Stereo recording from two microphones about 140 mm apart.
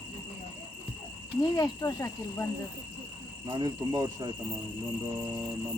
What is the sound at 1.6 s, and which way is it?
Speech, 25° left (ahead or behind).